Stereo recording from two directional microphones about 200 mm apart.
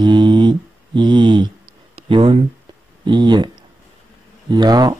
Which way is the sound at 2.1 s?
25° right (ahead or behind).